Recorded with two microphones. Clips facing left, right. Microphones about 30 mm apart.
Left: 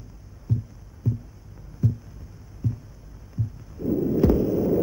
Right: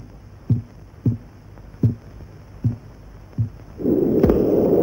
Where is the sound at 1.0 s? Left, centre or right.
Right.